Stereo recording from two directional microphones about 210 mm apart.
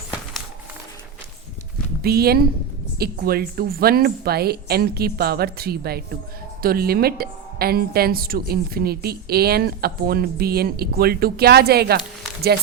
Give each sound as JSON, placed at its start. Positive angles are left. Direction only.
{"t": 2.0, "sound": "a woman's voice", "side_deg": -45}